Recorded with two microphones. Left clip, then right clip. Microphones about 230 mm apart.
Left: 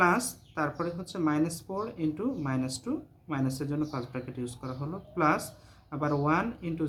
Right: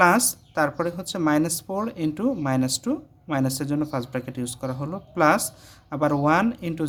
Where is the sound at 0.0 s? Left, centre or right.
Right.